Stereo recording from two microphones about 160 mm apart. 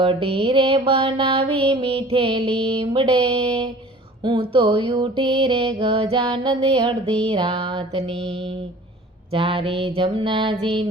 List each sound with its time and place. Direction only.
0.0 s music: 35° right (ahead or behind)
9.3 s music: 35° right (ahead or behind)